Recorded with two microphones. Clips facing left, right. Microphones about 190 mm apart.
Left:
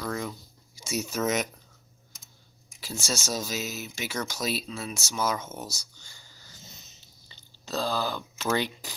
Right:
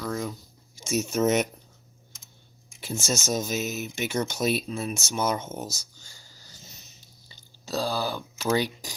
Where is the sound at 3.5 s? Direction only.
55° right (ahead or behind).